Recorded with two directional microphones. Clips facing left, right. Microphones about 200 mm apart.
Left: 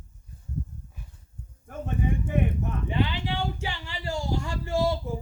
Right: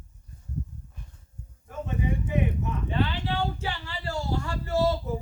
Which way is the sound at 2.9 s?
15° left (ahead or behind).